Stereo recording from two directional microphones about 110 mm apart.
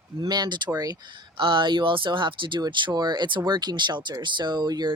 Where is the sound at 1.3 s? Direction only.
45° right (ahead or behind).